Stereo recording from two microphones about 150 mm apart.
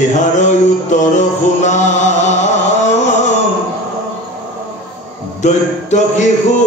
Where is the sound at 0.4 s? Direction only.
50° left (ahead or behind).